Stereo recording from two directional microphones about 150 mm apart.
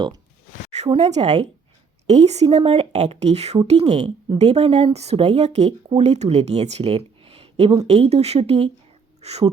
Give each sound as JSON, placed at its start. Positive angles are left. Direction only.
{"t": 0.7, "sound": "speech", "side_deg": -50}